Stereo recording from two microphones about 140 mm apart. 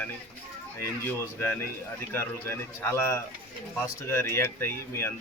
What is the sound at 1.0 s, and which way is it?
Speech, 15° left (ahead or behind).